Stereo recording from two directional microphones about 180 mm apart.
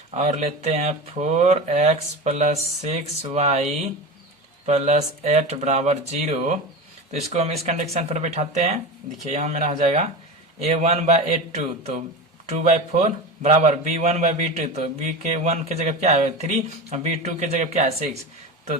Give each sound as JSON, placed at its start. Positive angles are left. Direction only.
{"t": 0.2, "sound": "a man's voice", "side_deg": -40}
{"t": 12.5, "sound": "a man's voice", "side_deg": -40}